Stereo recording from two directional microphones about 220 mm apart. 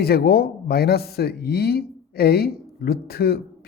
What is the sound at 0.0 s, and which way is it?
Speech, 45° left (ahead or behind).